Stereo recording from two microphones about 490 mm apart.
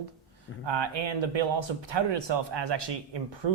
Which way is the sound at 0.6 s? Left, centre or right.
Right.